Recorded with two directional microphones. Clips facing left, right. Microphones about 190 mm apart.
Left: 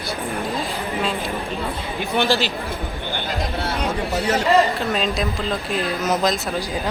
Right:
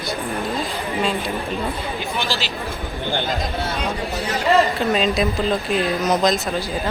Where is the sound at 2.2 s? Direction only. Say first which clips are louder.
Left 9 dB; 55° left (ahead or behind).